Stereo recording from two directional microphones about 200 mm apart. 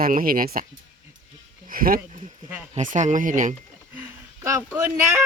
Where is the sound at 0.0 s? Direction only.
45° right (ahead or behind).